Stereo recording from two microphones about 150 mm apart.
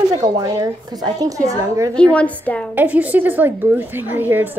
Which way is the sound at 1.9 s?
10° left (ahead or behind).